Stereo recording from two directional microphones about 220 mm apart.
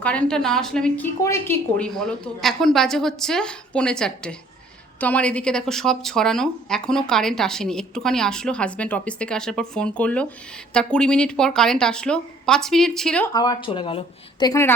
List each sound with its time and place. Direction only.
0.0 s speech: 5° left (ahead or behind)
13.3 s speech: 20° left (ahead or behind)